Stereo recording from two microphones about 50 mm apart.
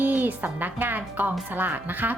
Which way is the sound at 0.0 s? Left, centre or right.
Right.